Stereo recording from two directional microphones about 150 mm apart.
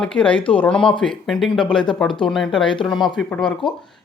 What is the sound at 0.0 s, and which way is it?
Speech, 5° left (ahead or behind).